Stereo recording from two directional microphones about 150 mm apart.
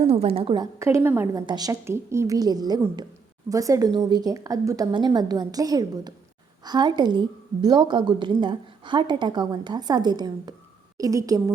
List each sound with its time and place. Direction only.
0.1 s a woman's voice: 40° right (ahead or behind)
0.6 s a woman's voice: 20° right (ahead or behind)